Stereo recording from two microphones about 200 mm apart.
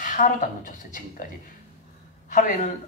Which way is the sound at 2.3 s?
40° left (ahead or behind).